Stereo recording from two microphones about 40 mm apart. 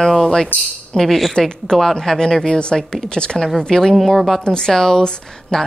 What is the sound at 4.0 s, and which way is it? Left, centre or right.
Speech, centre.